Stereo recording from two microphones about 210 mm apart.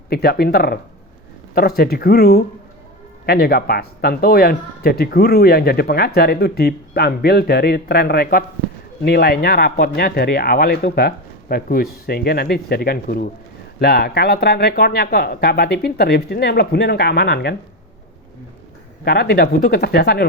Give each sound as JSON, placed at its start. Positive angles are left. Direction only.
{"t": 0.1, "sound": "speech", "side_deg": 50}
{"t": 19.0, "sound": "speech", "side_deg": 50}